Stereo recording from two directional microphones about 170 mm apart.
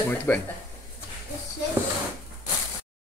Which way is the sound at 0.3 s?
15° left (ahead or behind).